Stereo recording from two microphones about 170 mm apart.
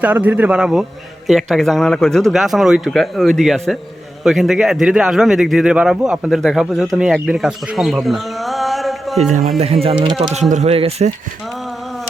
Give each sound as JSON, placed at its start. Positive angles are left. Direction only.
{"t": 0.0, "sound": "a man's voice", "side_deg": -10}
{"t": 10.0, "sound": "speech", "side_deg": -35}